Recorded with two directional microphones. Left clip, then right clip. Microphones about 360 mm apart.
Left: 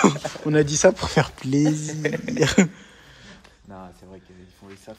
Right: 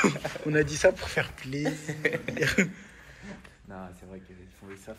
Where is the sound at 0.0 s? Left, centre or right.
Centre.